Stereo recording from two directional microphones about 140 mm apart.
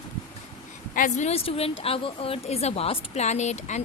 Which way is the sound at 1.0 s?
65° left (ahead or behind).